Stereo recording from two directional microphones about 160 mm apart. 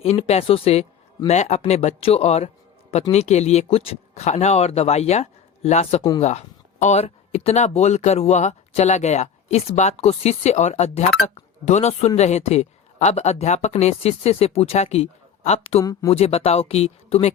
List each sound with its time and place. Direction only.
0.0 s speech: 40° left (ahead or behind)
6.0 s speech: 25° left (ahead or behind)
6.2 s speech: 45° left (ahead or behind)
15.8 s speech: 20° left (ahead or behind)
16.0 s speech: 40° left (ahead or behind)